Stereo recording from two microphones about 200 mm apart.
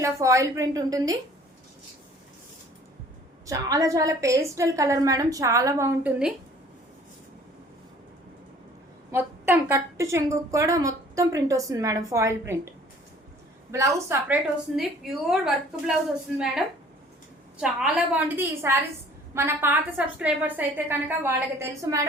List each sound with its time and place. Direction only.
0.0 s a woman's voice: 15° right (ahead or behind)
3.4 s a woman's voice: 15° right (ahead or behind)
9.1 s a woman's voice: 10° right (ahead or behind)
13.7 s a woman's voice: 15° right (ahead or behind)
14.8 s a woman's voice: centre (ahead or behind)
17.6 s a woman's voice: 5° right (ahead or behind)